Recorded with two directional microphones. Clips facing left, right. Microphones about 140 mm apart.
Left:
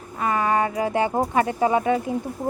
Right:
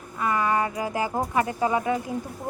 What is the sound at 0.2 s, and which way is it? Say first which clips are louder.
Speech: left 2 dB; 25° left (ahead or behind).